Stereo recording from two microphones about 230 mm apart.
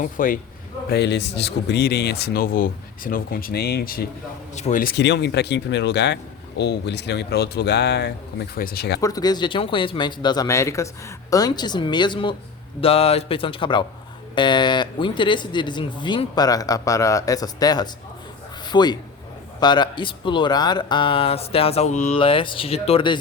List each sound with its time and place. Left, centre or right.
0.0 s a man's voice: left
0.9 s speech: left
9.0 s a man's voice: centre